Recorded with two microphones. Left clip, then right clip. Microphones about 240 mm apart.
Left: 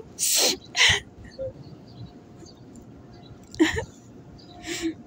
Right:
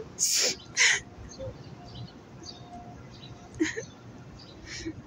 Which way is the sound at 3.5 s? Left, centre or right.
Left.